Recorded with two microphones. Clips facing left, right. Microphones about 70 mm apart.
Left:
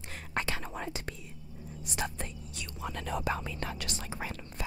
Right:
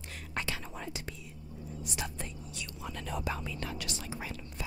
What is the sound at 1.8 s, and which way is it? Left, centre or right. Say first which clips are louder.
Speech: left 4 dB; left.